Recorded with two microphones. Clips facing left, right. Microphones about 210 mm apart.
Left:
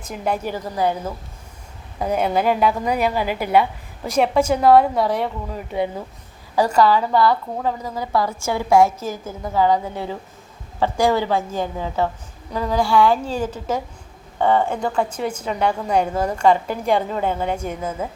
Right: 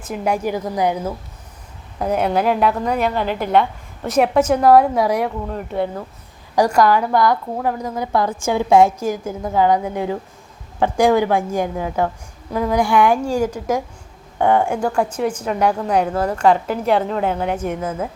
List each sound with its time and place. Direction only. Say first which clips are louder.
0.1 s a woman's voice: right 3 dB; 10° right (ahead or behind)
2.1 s a woman's voice: right 1 dB; centre (ahead or behind)
4.2 s a woman's voice: right 2 dB; 5° right (ahead or behind)
6.6 s a woman's voice: right 1 dB; 10° right (ahead or behind)
16.1 s a woman's voice: right 2 dB; 10° left (ahead or behind)
16.4 s a woman's voice: right 1 dB; 5° right (ahead or behind)